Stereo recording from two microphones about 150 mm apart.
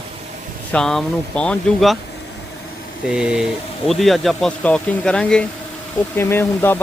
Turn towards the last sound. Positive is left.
turn(degrees=15)  # may be behind; listen again after turning